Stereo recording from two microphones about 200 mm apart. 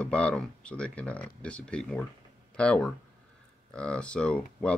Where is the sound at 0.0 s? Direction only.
5° left (ahead or behind).